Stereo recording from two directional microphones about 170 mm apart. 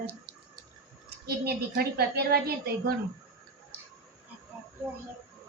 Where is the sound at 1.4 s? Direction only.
65° right (ahead or behind).